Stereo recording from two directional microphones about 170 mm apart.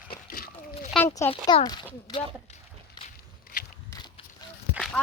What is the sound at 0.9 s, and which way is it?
Speech, 15° left (ahead or behind).